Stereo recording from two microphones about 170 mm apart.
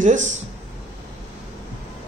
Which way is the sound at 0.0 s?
45° right (ahead or behind).